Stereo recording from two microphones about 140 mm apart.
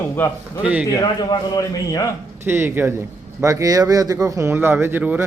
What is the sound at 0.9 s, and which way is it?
A man's voice, 25° left (ahead or behind).